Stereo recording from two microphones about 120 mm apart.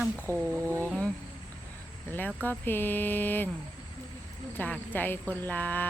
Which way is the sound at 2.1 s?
15° left (ahead or behind).